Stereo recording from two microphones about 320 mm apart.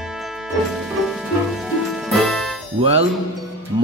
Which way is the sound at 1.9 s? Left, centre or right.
Centre.